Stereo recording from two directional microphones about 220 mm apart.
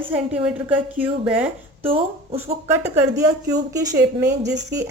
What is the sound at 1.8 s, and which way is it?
Speech, 25° right (ahead or behind).